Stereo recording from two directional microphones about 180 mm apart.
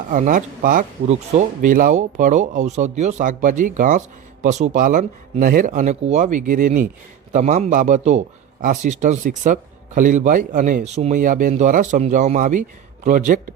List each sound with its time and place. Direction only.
0.1 s a man's voice: 45° right (ahead or behind)